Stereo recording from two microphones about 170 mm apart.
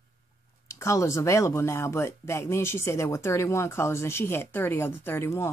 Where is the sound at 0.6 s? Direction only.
15° left (ahead or behind).